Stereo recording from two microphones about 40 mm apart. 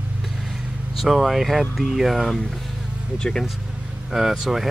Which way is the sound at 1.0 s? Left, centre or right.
Centre.